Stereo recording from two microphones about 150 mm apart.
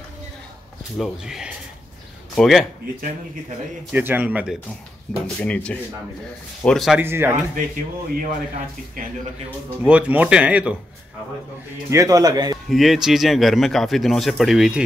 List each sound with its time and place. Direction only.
0.9 s a man's voice: centre (ahead or behind)
3.9 s speech: 10° right (ahead or behind)
5.2 s a man's voice: 5° left (ahead or behind)
7.0 s speech: 15° right (ahead or behind)
7.5 s speech: 65° right (ahead or behind)
9.8 s speech: 10° right (ahead or behind)
11.9 s a man's voice: 20° right (ahead or behind)
12.6 s a man's voice: centre (ahead or behind)